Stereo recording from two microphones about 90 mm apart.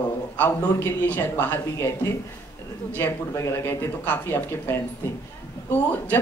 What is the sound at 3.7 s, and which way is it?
A woman's voice, 25° left (ahead or behind).